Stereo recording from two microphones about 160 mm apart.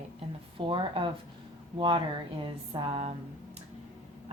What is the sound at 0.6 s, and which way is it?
Speech, 30° right (ahead or behind).